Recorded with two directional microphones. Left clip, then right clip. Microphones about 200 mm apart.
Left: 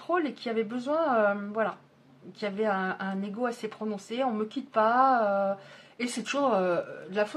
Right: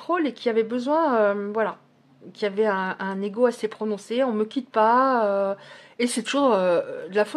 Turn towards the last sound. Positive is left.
turn(degrees=-40)  # may be behind; listen again after turning